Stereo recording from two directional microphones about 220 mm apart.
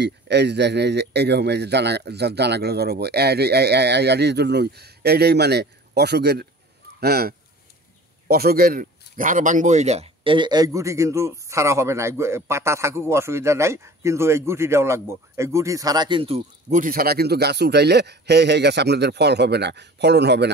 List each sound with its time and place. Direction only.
0.0 s speech: 50° right (ahead or behind)